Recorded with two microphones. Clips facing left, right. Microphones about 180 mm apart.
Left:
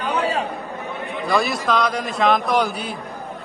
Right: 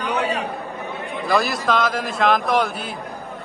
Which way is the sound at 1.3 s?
Centre (ahead or behind).